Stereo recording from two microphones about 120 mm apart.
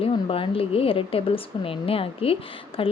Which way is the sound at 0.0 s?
50° left (ahead or behind).